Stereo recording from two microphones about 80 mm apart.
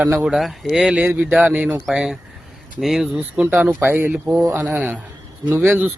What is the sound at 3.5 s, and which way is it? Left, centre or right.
A man's voice, right.